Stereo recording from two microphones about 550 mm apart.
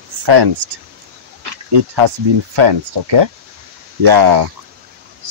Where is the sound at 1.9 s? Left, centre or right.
Right.